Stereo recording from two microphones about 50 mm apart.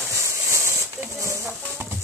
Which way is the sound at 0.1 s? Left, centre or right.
Right.